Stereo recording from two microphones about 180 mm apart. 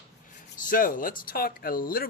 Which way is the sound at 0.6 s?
50° left (ahead or behind).